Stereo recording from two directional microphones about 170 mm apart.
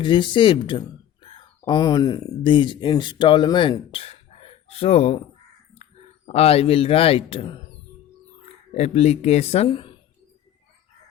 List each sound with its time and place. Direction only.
0.0 s speech: 30° left (ahead or behind)
8.7 s speech: 40° left (ahead or behind)